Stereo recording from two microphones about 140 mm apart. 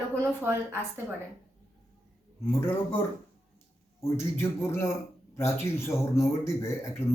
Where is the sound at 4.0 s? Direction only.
20° left (ahead or behind).